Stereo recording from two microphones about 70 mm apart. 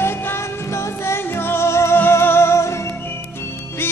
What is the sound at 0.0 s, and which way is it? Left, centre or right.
Music, left.